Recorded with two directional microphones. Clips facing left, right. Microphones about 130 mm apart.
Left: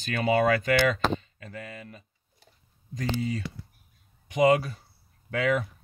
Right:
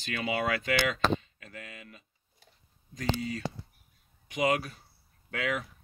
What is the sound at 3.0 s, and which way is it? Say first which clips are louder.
Speech: left 3 dB; 30° left (ahead or behind).